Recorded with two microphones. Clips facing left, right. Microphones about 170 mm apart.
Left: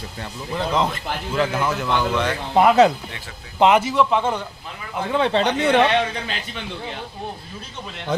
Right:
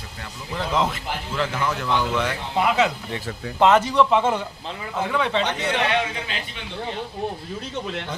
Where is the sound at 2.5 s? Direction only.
50° left (ahead or behind).